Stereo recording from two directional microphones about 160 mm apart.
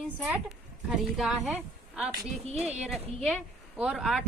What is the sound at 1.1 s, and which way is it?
Speech, centre (ahead or behind).